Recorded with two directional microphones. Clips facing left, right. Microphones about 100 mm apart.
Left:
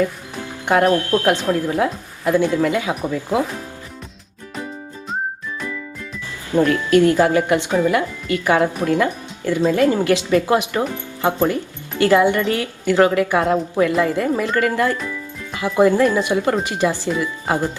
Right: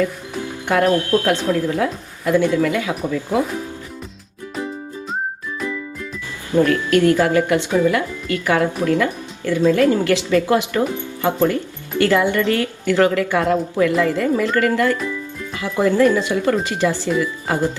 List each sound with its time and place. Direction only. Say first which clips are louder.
1.1 s a woman's voice: even; 20° left (ahead or behind)
6.7 s speech: left 3 dB; 20° left (ahead or behind)